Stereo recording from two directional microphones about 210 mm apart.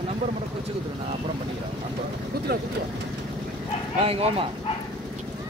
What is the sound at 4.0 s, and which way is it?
Speech, 30° right (ahead or behind).